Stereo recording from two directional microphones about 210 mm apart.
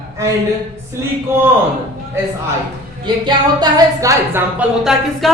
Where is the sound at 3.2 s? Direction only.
20° right (ahead or behind).